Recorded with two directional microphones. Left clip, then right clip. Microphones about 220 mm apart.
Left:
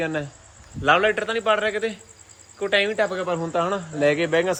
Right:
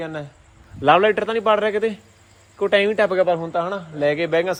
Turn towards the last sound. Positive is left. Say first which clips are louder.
# right 1 dB
turn(degrees=10)  # may be behind; listen again after turning